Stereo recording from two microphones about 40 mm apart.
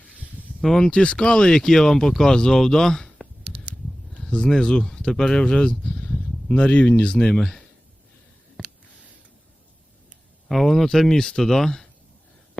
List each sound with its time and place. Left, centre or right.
0.6 s speech: centre
0.9 s speech: left
4.3 s speech: centre
8.6 s a sound: centre
10.5 s speech: centre